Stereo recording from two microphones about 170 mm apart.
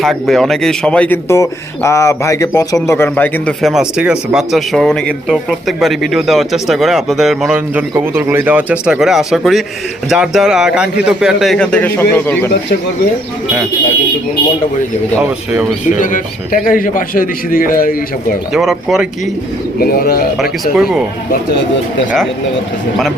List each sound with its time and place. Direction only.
0.0 s speech: centre (ahead or behind)
15.2 s speech: 10° right (ahead or behind)
15.9 s a man's voice: 50° left (ahead or behind)
18.5 s speech: centre (ahead or behind)
19.8 s speech: 60° left (ahead or behind)
20.4 s speech: 5° right (ahead or behind)